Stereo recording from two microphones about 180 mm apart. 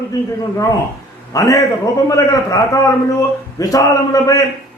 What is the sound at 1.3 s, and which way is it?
A man's voice, 20° left (ahead or behind).